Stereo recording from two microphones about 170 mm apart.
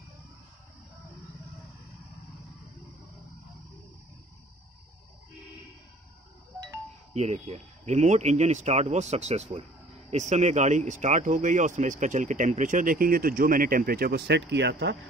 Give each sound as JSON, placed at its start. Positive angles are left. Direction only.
{"t": 7.2, "sound": "speech", "side_deg": -40}